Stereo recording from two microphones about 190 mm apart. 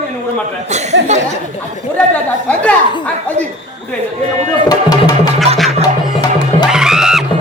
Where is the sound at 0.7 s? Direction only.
35° right (ahead or behind).